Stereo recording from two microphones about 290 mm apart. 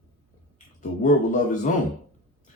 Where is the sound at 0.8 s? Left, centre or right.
Left.